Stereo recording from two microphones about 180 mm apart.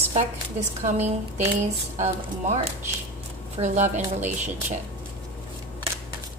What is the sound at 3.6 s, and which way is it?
Speech, 30° right (ahead or behind).